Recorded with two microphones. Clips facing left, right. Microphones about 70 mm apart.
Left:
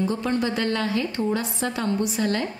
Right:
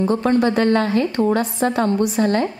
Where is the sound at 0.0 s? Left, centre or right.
Right.